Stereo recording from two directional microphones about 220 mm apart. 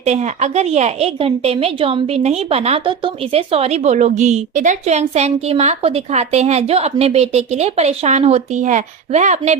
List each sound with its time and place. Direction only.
0.0 s a woman's voice: 30° right (ahead or behind)